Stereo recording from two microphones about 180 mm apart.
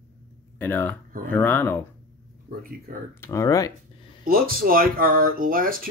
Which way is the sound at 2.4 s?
50° right (ahead or behind).